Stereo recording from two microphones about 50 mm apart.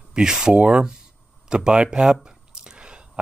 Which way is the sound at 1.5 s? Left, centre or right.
Centre.